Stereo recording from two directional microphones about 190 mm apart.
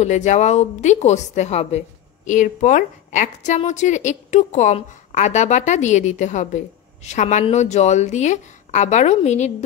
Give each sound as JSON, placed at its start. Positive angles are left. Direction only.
{"t": 0.0, "sound": "a woman's voice", "side_deg": 40}